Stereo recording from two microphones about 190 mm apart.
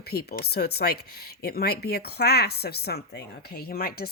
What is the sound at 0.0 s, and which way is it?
Speech, 55° left (ahead or behind).